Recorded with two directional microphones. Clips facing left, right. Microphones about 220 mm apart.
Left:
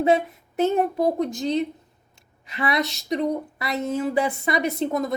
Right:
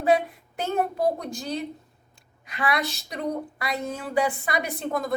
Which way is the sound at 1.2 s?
20° left (ahead or behind).